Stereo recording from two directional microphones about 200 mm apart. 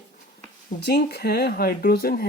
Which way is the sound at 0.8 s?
55° left (ahead or behind).